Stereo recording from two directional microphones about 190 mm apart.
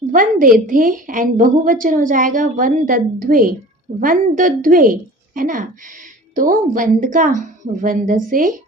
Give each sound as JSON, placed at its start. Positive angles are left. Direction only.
{"t": 0.1, "sound": "a woman's voice", "side_deg": -45}